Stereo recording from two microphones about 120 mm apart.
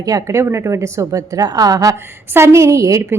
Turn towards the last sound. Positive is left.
turn(degrees=-25)  # may be behind; listen again after turning